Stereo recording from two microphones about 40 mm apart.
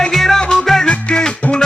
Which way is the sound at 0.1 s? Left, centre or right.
Centre.